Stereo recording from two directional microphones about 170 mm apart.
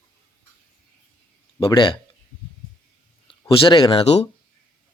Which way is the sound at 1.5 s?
30° left (ahead or behind).